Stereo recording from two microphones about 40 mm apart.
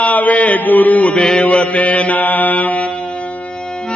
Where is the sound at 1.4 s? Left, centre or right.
Left.